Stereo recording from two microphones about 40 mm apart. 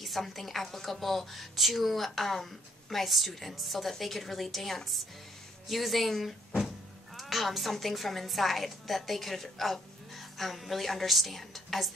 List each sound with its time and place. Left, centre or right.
0.0 s a woman's voice: centre